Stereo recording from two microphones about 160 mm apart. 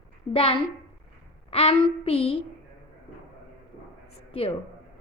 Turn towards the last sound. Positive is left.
turn(degrees=35)  # may be behind; listen again after turning